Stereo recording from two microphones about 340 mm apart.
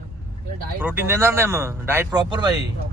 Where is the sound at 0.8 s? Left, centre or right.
Centre.